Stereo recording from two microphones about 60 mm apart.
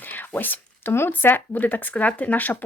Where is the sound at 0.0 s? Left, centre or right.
Left.